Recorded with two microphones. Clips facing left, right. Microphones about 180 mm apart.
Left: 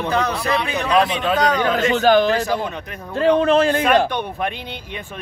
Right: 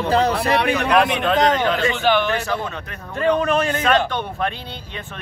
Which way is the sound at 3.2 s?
30° left (ahead or behind).